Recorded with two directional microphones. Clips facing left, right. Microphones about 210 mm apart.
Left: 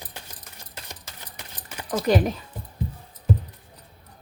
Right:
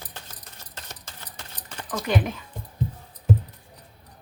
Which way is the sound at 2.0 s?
40° left (ahead or behind).